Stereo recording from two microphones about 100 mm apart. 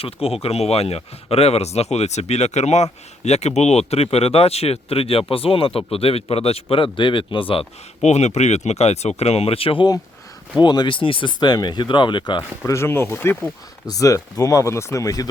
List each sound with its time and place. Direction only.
0.0 s speech: 85° left; by 7.7 s 65° left (ahead or behind)
8.1 s speech: 90° left; by 9.8 s 70° left (ahead or behind)
10.6 s speech: 50° left (ahead or behind)
11.3 s speech: 45° left (ahead or behind)
12.4 s speech: 30° left (ahead or behind)
13.8 s speech: 35° left (ahead or behind)